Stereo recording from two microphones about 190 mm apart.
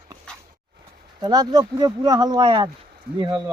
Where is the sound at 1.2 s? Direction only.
20° right (ahead or behind).